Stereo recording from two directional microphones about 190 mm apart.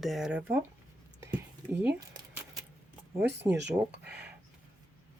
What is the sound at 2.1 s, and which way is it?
Keys jangling, 20° right (ahead or behind).